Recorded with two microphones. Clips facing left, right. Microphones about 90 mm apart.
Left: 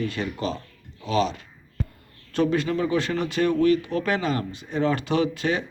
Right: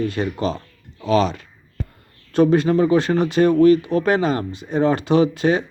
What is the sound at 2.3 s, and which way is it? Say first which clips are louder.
Speech: right 7 dB; 30° right (ahead or behind).